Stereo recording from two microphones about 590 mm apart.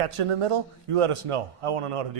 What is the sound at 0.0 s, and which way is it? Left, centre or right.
A man's voice, right.